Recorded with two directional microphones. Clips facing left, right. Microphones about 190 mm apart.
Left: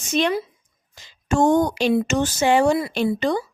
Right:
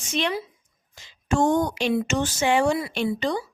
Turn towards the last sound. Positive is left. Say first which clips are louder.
# left 4 dB
turn(degrees=50)  # may be behind; listen again after turning